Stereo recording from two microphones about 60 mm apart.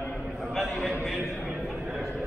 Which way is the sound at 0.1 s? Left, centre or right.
Centre.